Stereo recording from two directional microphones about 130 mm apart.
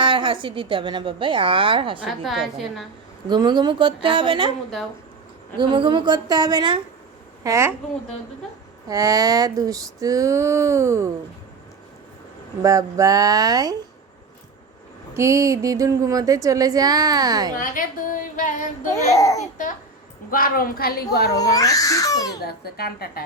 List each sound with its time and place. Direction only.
0.0 s a woman's voice: 40° right (ahead or behind)
2.2 s a woman's voice: centre (ahead or behind)
3.2 s a woman's voice: 35° right (ahead or behind)
5.5 s a woman's voice: 40° right (ahead or behind)
7.4 s a woman's voice: 20° right (ahead or behind)
8.9 s speech: 30° right (ahead or behind)
12.6 s speech: 25° right (ahead or behind)
15.1 s speech: 20° right (ahead or behind)
17.6 s a woman's voice: 90° left
18.9 s speech: 25° left (ahead or behind)
19.4 s a woman's voice: 90° left
21.0 s speech: 30° left (ahead or behind)